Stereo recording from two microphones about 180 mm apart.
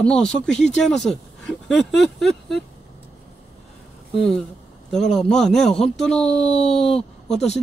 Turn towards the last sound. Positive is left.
turn(degrees=0)  # may be behind; listen again after turning